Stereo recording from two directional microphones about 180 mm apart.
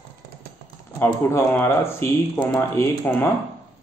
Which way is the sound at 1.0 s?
10° left (ahead or behind).